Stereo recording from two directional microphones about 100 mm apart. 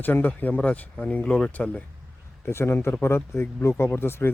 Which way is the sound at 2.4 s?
25° left (ahead or behind).